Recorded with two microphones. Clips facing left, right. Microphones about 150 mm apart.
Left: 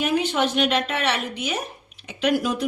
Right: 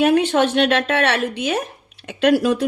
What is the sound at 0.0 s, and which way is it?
Speech, 65° right (ahead or behind).